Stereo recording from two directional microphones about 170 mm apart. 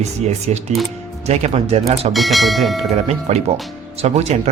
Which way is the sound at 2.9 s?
40° right (ahead or behind).